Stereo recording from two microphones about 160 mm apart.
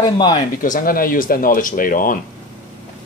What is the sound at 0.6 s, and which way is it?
Speech, 60° left (ahead or behind).